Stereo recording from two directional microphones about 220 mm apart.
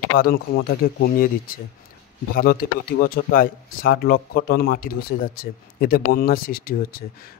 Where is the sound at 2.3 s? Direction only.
40° left (ahead or behind).